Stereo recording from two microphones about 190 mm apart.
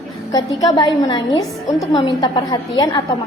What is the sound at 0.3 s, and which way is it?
A woman's voice, 20° left (ahead or behind).